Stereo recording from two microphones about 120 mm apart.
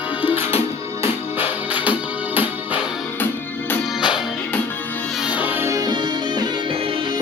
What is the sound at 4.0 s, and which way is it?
Music, 5° right (ahead or behind).